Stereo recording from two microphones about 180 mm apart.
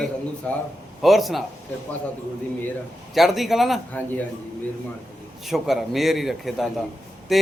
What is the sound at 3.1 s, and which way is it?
Speech, centre (ahead or behind).